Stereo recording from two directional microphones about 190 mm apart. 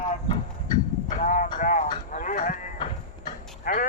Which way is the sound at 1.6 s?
40° left (ahead or behind).